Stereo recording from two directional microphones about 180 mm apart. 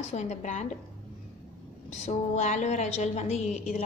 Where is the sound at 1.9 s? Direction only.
40° left (ahead or behind).